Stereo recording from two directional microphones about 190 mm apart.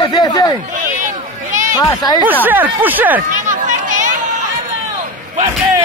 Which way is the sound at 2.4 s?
10° right (ahead or behind).